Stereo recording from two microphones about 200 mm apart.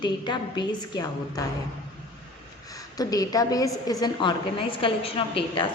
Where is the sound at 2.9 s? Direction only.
20° left (ahead or behind).